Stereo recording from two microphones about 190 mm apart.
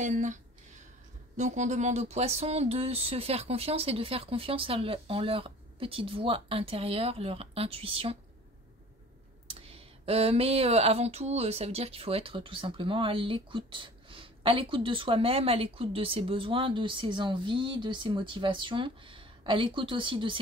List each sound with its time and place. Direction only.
0.0 s speech: 40° right (ahead or behind)
9.5 s speech: 30° right (ahead or behind)